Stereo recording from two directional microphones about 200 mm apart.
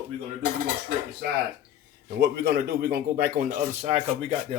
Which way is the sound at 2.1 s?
55° right (ahead or behind).